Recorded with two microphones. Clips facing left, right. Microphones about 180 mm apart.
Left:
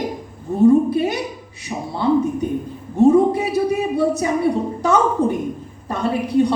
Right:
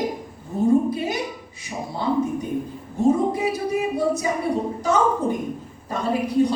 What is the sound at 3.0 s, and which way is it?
A man's voice, 65° left (ahead or behind).